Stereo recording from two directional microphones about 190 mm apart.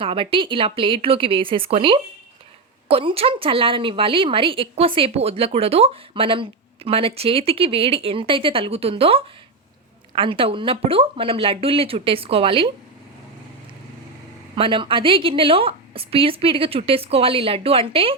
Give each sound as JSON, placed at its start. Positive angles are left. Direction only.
{"t": 0.0, "sound": "a woman's voice", "side_deg": -30}
{"t": 14.5, "sound": "a woman's voice", "side_deg": -25}